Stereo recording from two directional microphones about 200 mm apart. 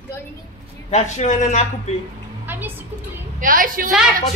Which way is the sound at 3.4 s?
45° right (ahead or behind).